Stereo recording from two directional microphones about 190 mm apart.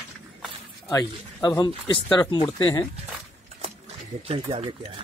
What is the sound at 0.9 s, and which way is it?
Speech, 20° left (ahead or behind).